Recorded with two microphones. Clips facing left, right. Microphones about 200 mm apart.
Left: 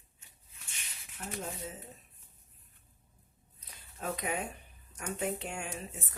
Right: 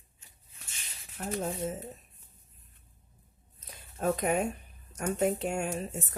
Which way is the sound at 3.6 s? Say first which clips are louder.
Right 9 dB; 45° right (ahead or behind).